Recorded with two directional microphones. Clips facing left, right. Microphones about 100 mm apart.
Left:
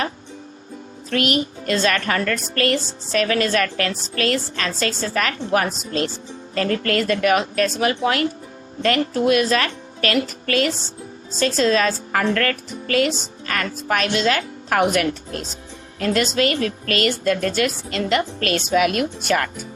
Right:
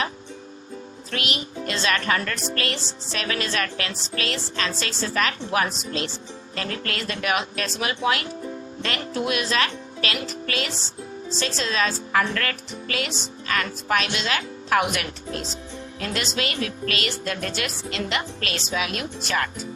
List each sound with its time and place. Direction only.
1.1 s speech: 45° left (ahead or behind)